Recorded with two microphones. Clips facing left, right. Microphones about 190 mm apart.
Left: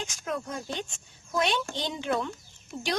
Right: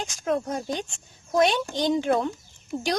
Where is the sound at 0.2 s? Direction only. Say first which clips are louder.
Right 9 dB; 40° right (ahead or behind).